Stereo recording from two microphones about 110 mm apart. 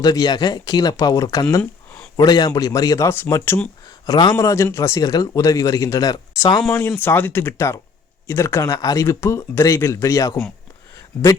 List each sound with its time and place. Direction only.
0.0 s speech: 35° left (ahead or behind)
6.9 s speech: 15° left (ahead or behind)